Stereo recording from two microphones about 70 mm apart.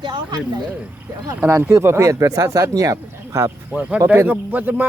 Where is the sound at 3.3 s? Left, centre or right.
Right.